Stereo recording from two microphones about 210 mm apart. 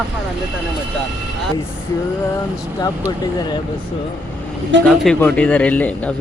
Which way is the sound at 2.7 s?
20° left (ahead or behind).